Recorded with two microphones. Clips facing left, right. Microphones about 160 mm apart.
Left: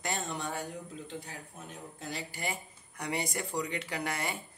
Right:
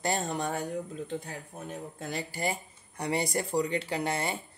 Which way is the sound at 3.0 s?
30° right (ahead or behind).